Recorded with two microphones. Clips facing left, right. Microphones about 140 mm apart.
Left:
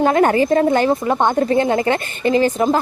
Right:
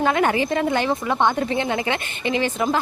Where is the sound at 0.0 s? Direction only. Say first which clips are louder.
Left 5 dB; 40° left (ahead or behind).